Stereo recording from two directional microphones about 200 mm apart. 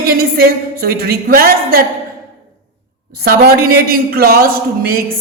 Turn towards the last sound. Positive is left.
turn(degrees=-50)  # may be behind; listen again after turning